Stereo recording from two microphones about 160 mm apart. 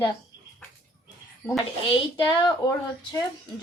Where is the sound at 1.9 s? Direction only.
30° left (ahead or behind).